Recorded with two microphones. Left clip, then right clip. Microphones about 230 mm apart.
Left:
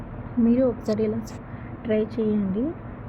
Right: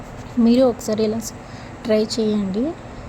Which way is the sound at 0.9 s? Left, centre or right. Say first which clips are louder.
Right 4 dB; centre.